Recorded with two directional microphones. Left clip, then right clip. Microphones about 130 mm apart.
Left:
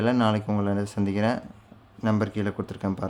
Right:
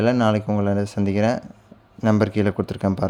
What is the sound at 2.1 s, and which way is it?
Speech, 40° right (ahead or behind).